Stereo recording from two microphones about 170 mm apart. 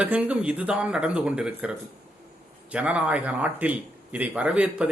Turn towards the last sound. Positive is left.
turn(degrees=-5)  # may be behind; listen again after turning